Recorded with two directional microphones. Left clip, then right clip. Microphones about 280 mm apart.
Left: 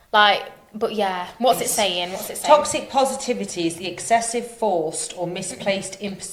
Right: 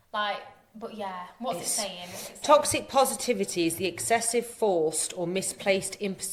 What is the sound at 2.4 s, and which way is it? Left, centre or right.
A woman's voice, right.